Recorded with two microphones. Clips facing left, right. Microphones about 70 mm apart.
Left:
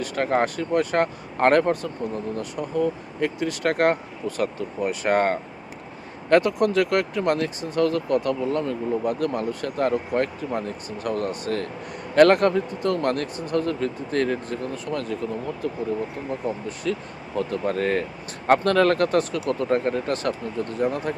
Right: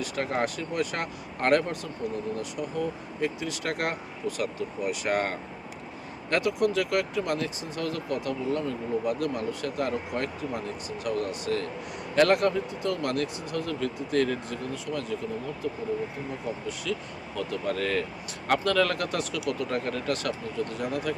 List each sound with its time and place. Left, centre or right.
0.0 s speech: left
16.6 s speech: left